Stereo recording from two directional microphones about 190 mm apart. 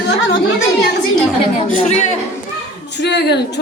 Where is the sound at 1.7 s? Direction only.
40° left (ahead or behind).